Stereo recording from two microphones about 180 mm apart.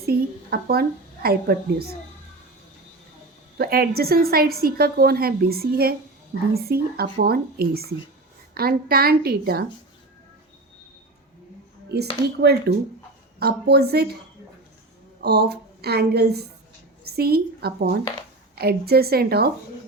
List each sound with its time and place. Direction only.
0.0 s a woman's voice: 60° right (ahead or behind)
3.6 s a woman's voice: 60° right (ahead or behind)
11.9 s a woman's voice: 65° right (ahead or behind)
15.2 s a woman's voice: 65° right (ahead or behind)